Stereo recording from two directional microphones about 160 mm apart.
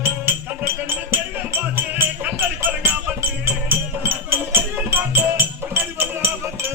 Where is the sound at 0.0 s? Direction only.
15° right (ahead or behind).